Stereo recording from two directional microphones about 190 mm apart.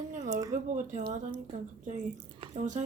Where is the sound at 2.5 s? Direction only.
40° right (ahead or behind).